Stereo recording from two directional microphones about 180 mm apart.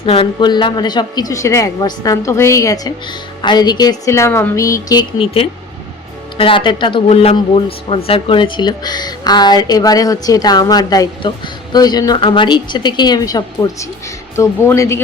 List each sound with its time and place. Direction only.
0.0 s speech: 30° left (ahead or behind); by 15.0 s 15° left (ahead or behind)